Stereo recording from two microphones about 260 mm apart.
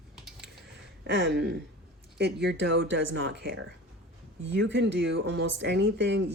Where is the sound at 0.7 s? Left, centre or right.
Right.